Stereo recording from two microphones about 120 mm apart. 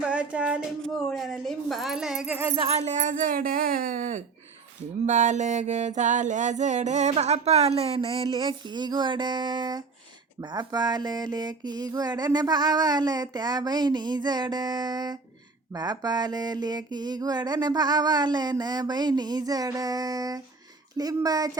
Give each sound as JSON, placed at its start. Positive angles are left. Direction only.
{"t": 0.1, "sound": "music", "side_deg": -10}
{"t": 1.1, "sound": "speech", "side_deg": 0}
{"t": 2.7, "sound": "a sound", "side_deg": -80}
{"t": 3.9, "sound": "speech", "side_deg": -90}
{"t": 5.0, "sound": "music", "side_deg": -85}
{"t": 10.4, "sound": "a sound", "side_deg": -35}
{"t": 21.0, "sound": "speech", "side_deg": -30}